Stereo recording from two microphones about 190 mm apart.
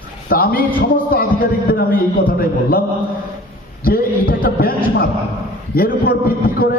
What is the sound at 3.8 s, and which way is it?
A man's voice, 50° left (ahead or behind).